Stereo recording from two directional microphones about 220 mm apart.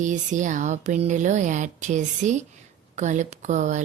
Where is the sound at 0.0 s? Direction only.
35° right (ahead or behind).